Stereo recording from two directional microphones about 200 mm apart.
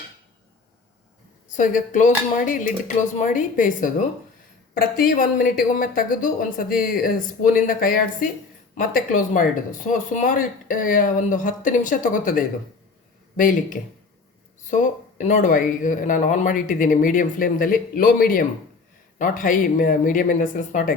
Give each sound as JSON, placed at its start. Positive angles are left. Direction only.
{"t": 1.5, "sound": "speech", "side_deg": 40}